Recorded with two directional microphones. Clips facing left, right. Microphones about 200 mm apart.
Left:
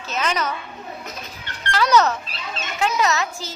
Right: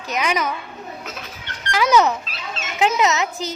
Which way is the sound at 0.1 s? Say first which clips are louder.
Right 2 dB; 15° right (ahead or behind).